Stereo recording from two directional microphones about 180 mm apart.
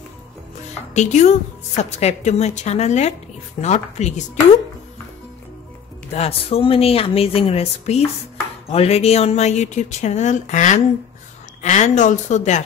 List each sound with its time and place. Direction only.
0.9 s speech: 40° left (ahead or behind)
6.1 s speech: 35° left (ahead or behind)